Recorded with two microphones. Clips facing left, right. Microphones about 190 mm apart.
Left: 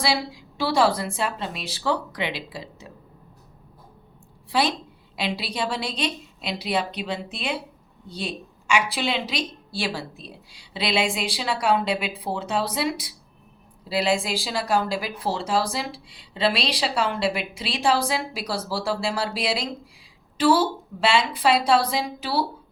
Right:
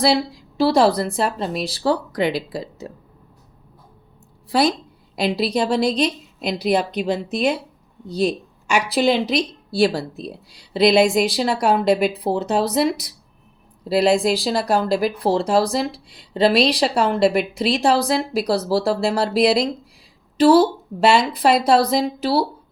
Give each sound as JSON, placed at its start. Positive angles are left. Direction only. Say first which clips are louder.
{"t": 0.0, "sound": "speech", "louder": "right 7 dB", "side_deg": -35}
{"t": 5.1, "sound": "speech", "louder": "right 8 dB", "side_deg": -40}